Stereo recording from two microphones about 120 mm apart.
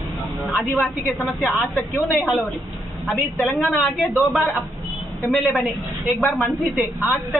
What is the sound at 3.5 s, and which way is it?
A woman's voice, centre (ahead or behind).